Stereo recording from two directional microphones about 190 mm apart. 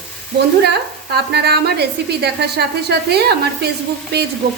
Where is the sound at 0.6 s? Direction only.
60° right (ahead or behind).